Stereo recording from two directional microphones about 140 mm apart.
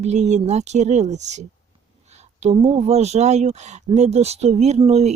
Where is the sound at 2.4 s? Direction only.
45° right (ahead or behind).